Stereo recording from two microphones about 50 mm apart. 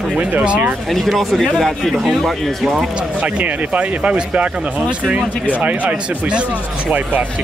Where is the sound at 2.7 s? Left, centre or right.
Right.